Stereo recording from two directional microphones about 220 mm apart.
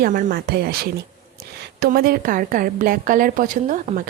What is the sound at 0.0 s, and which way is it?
A woman's voice, 40° right (ahead or behind).